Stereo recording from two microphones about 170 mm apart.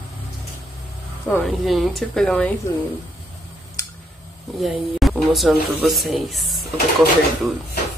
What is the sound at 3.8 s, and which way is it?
Tick, 20° left (ahead or behind).